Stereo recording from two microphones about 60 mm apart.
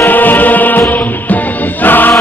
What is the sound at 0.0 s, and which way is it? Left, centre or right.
Music, left.